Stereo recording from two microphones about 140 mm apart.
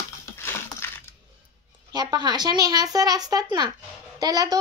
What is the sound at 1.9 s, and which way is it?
A woman's voice, 30° right (ahead or behind).